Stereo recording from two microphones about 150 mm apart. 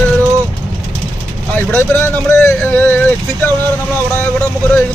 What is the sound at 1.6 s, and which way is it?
Speech, 15° left (ahead or behind).